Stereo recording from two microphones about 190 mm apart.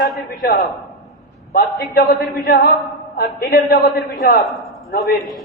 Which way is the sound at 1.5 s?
55° left (ahead or behind).